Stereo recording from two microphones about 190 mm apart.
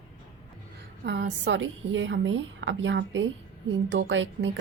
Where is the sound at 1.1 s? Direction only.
70° right (ahead or behind).